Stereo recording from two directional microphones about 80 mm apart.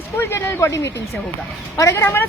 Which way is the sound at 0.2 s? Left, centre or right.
Left.